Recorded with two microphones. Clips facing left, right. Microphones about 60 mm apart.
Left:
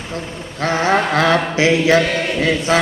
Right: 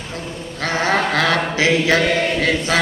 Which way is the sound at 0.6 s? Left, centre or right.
Left.